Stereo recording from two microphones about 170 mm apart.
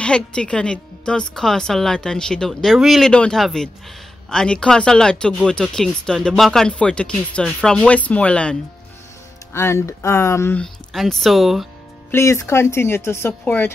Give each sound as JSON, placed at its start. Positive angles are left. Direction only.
{"t": 0.0, "sound": "a woman's voice", "side_deg": 5}
{"t": 10.6, "sound": "a woman's voice", "side_deg": 0}
{"t": 12.1, "sound": "speech", "side_deg": 15}